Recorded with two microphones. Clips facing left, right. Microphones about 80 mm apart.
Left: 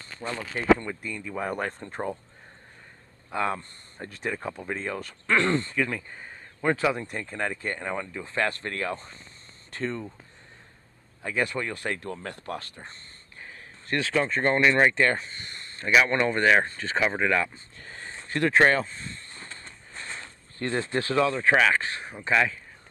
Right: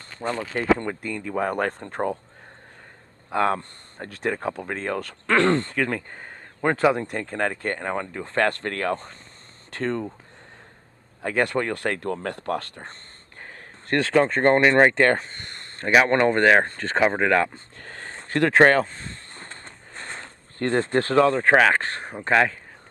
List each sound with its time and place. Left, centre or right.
0.2 s speech: right
3.3 s speech: right
11.2 s speech: right